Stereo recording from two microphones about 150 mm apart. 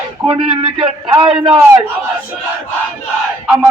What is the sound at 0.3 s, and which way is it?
Speech, 35° right (ahead or behind).